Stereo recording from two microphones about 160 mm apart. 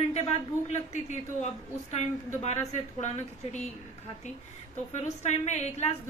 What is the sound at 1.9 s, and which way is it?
A woman's voice, 45° left (ahead or behind).